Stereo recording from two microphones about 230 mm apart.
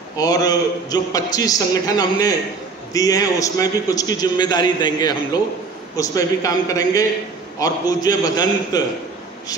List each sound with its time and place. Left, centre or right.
0.2 s a man's voice: centre